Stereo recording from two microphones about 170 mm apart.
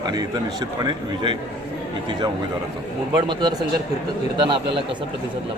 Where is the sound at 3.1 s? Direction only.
25° right (ahead or behind).